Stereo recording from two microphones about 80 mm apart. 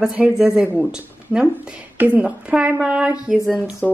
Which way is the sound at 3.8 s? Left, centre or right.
Centre.